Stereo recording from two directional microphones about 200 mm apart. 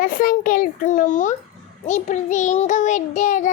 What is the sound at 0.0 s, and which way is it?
A child's voice, 45° left (ahead or behind).